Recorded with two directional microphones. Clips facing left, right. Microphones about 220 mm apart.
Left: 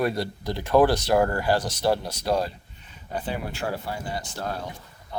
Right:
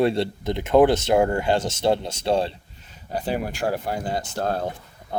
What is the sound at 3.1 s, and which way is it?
Speech, 40° right (ahead or behind).